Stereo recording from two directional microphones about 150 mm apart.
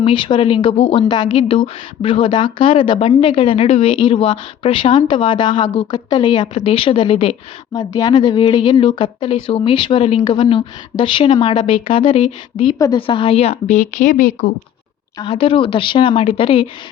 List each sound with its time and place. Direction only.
0.0 s speech: 35° left (ahead or behind)
7.7 s a woman's voice: 25° left (ahead or behind); by 14.5 s 60° left (ahead or behind)
15.2 s speech: 40° left (ahead or behind)